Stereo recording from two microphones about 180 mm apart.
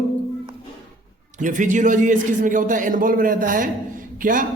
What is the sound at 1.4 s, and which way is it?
A man's voice, 45° right (ahead or behind).